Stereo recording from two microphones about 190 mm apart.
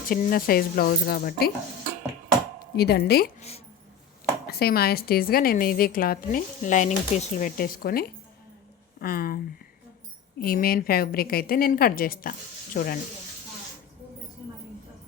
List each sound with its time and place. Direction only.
0.1 s a woman's voice: 50° left (ahead or behind)
2.7 s speech: 55° left (ahead or behind)
4.4 s a woman's voice: 55° left (ahead or behind)
10.4 s a woman's voice: 50° left (ahead or behind)